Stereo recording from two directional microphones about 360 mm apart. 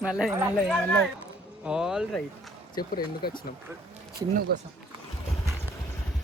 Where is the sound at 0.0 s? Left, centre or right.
Centre.